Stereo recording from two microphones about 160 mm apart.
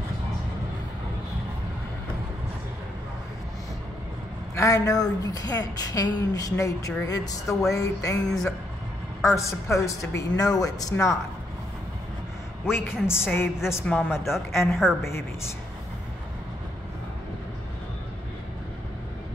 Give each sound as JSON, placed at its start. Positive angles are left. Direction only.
{"t": 4.6, "sound": "speech", "side_deg": 20}
{"t": 12.6, "sound": "a woman's voice", "side_deg": 15}
{"t": 14.7, "sound": "a woman's voice", "side_deg": 0}